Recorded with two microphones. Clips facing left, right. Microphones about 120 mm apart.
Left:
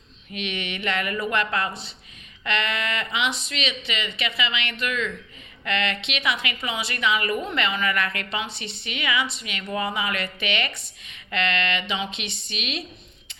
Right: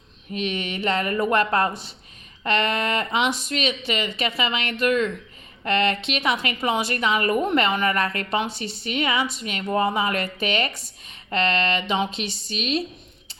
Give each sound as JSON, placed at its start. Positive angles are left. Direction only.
{"t": 0.3, "sound": "a woman's voice", "side_deg": -40}